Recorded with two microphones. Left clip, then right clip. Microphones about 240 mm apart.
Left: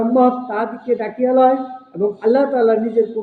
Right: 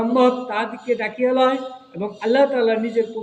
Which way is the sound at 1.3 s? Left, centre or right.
Centre.